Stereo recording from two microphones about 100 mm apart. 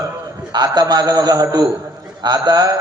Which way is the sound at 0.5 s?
45° right (ahead or behind).